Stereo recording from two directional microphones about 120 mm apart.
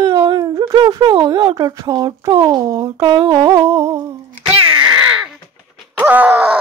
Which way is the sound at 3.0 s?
40° right (ahead or behind).